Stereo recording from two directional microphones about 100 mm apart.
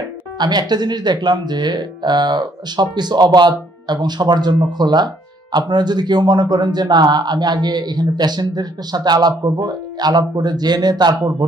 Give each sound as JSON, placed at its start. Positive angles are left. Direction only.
{"t": 0.4, "sound": "speech", "side_deg": -45}